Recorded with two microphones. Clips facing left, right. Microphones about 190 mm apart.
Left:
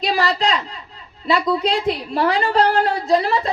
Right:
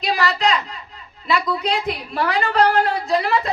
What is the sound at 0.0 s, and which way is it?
A woman's voice, 30° left (ahead or behind).